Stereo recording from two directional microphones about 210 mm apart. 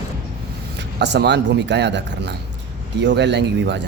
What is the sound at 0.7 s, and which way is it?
A man's voice, 55° right (ahead or behind).